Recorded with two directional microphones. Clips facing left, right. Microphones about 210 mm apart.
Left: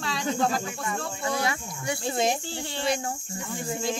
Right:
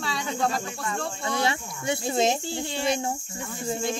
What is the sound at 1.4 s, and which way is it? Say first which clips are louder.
Speech: right 2 dB; 25° right (ahead or behind).